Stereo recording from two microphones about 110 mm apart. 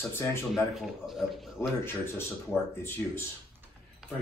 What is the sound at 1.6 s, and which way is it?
Speech, 20° left (ahead or behind).